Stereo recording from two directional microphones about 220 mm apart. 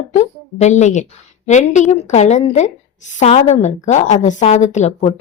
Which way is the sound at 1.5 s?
30° left (ahead or behind).